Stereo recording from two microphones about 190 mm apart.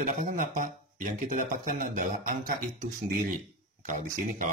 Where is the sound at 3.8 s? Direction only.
45° right (ahead or behind).